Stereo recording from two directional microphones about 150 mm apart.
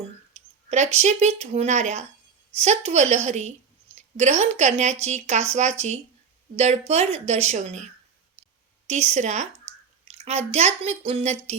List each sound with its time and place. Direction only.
0.3 s speech: 50° right (ahead or behind)
8.9 s speech: 50° right (ahead or behind)